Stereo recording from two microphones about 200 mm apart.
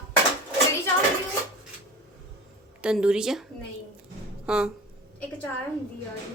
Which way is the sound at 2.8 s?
5° right (ahead or behind).